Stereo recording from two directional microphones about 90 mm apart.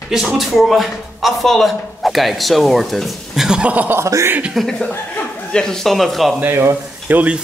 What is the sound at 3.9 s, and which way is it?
Speech, 30° right (ahead or behind).